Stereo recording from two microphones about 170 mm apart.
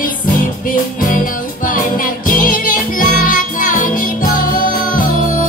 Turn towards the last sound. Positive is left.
turn(degrees=55)  # may be behind; listen again after turning